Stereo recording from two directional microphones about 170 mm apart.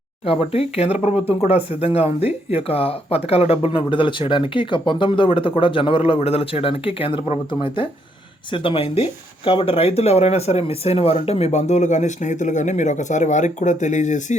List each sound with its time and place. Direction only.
0.3 s speech: 35° left (ahead or behind)